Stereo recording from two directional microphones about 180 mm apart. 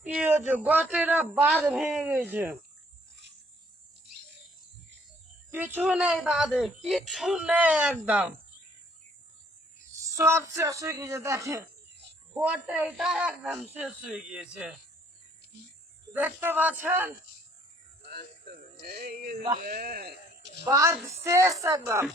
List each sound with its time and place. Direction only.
0.0 s speech: 10° right (ahead or behind)
5.5 s speech: 10° right (ahead or behind)
10.1 s speech: 15° right (ahead or behind)
16.1 s speech: 10° right (ahead or behind)
18.1 s speech: 55° right (ahead or behind)
20.7 s speech: 15° right (ahead or behind)